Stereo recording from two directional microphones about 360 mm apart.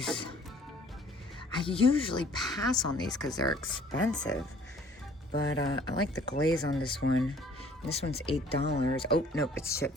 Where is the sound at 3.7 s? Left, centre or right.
Left.